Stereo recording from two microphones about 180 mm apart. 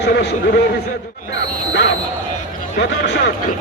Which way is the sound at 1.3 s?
80° left.